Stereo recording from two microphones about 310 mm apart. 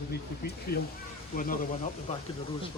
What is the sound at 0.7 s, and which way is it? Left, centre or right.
Speech, left.